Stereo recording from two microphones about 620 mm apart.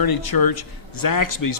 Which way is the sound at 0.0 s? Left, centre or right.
Left.